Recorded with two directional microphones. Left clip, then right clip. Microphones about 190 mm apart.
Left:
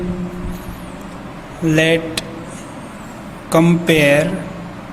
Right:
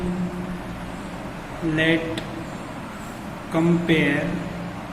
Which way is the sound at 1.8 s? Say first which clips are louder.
Left 6 dB; 55° left (ahead or behind).